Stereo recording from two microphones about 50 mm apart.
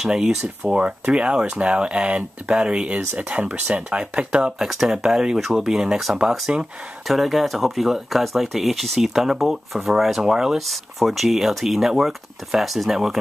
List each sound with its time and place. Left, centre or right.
0.7 s speech: right
4.6 s speech: centre